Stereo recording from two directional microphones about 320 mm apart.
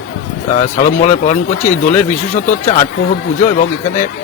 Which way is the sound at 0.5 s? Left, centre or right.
Left.